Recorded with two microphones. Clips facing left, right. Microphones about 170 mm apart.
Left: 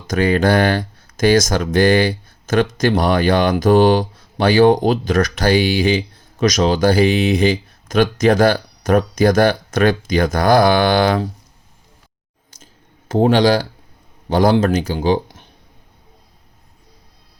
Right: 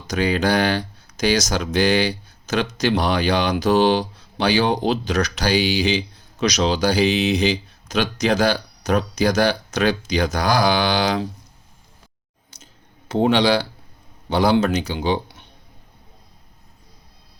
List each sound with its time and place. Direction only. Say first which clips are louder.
0.1 s speech: left 4 dB; 50° left (ahead or behind)
13.1 s speech: left 4 dB; 45° left (ahead or behind)